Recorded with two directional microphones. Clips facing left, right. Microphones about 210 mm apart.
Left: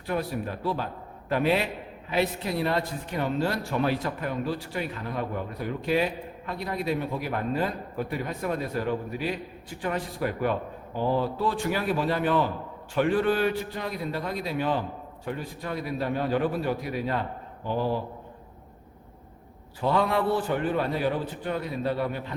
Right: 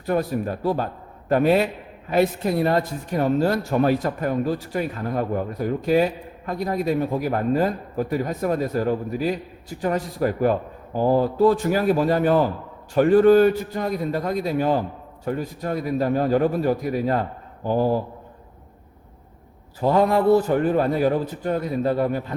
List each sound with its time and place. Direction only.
0.0 s speech: 45° right (ahead or behind)
19.8 s speech: 45° right (ahead or behind)